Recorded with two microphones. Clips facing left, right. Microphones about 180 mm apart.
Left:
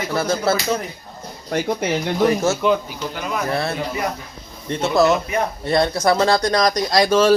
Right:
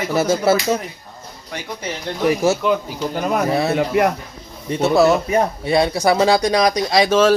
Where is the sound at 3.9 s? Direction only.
60° right (ahead or behind).